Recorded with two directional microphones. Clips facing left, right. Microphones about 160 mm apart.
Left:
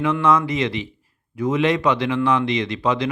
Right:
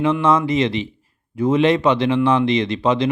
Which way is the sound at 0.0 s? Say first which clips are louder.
Right 2 dB; 25° right (ahead or behind).